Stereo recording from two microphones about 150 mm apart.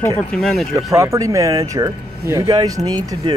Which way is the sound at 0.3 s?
5° left (ahead or behind).